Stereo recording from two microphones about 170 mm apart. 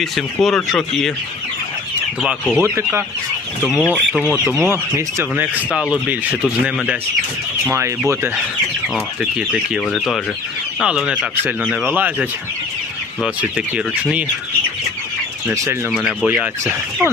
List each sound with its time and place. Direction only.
0.0 s speech: centre (ahead or behind)
2.2 s speech: 5° left (ahead or behind)
2.6 s speech: 15° right (ahead or behind)
3.6 s speech: 5° left (ahead or behind)
4.6 s speech: 15° right (ahead or behind)
7.7 s speech: 15° right (ahead or behind)
9.8 s speech: 5° left (ahead or behind)
15.5 s speech: 20° right (ahead or behind)
15.9 s speech: centre (ahead or behind)